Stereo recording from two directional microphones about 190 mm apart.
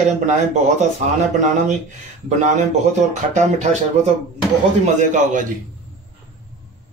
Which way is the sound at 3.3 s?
40° right (ahead or behind).